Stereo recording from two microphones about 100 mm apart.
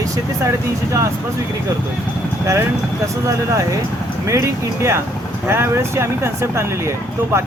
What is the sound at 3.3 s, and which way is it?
Speech, 30° right (ahead or behind).